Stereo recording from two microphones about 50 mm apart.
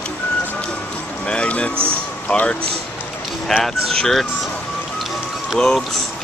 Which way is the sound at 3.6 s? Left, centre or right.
Centre.